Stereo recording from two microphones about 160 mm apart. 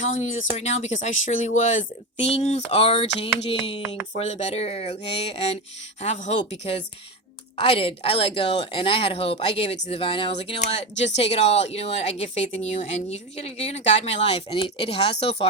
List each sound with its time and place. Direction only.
0.0 s speech: 50° left (ahead or behind)
2.2 s speech: 40° left (ahead or behind)